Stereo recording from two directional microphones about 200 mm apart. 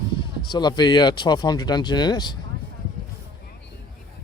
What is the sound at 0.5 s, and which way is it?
Speech, 20° left (ahead or behind).